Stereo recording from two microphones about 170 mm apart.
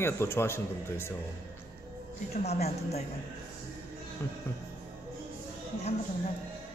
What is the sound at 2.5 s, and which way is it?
Speech, 40° left (ahead or behind).